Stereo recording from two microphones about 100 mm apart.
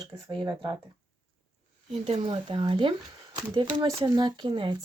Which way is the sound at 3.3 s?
45° right (ahead or behind).